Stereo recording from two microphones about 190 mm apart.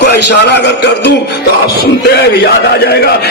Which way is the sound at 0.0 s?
60° left (ahead or behind).